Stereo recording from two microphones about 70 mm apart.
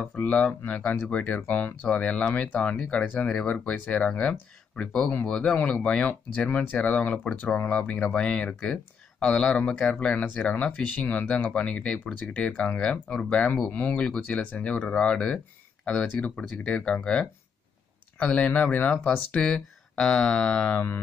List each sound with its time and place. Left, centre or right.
0.0 s speech: centre